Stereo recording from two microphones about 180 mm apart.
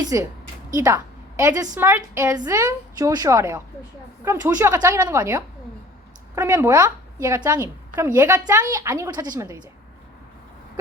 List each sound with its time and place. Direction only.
0.0 s a woman's voice: 20° right (ahead or behind)